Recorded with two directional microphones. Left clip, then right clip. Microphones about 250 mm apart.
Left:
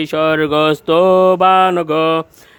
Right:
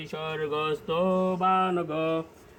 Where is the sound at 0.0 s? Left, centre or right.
Left.